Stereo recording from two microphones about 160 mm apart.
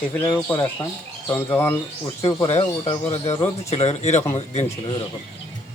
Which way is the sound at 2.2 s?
40° left (ahead or behind).